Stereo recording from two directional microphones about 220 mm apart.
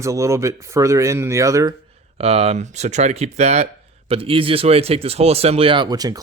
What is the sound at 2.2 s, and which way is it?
A man's voice, 25° right (ahead or behind).